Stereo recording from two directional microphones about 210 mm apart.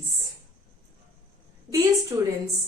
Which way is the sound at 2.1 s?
15° right (ahead or behind).